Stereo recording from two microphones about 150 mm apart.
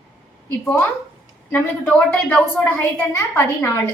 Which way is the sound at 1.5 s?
10° left (ahead or behind).